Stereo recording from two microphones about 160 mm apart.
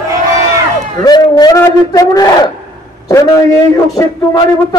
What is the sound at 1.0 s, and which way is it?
A man's voice, 25° left (ahead or behind).